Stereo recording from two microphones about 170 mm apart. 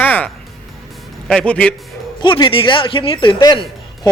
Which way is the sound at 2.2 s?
30° left (ahead or behind).